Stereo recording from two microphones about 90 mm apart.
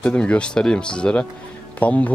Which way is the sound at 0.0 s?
15° left (ahead or behind).